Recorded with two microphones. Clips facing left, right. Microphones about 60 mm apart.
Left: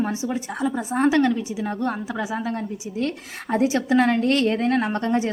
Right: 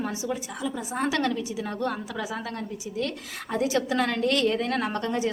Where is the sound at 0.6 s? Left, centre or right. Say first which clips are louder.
Left 9 dB; left.